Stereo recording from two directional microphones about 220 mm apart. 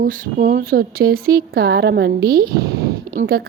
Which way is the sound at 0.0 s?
40° right (ahead or behind).